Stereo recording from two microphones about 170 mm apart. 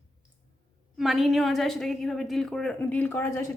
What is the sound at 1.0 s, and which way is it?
A woman's voice, centre (ahead or behind).